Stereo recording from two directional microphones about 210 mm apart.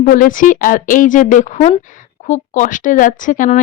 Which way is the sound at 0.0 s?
40° left (ahead or behind).